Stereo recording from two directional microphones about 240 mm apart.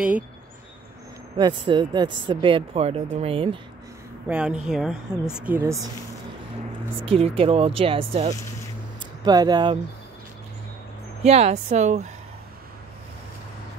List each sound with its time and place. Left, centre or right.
1.4 s speech: centre
4.3 s speech: centre
7.0 s speech: right
11.2 s speech: right